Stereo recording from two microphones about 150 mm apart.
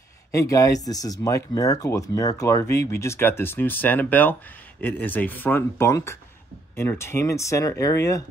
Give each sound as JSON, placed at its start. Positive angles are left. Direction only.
{"t": 0.3, "sound": "speech", "side_deg": 20}